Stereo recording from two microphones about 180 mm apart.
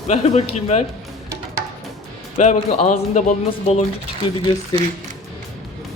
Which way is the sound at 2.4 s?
40° left (ahead or behind).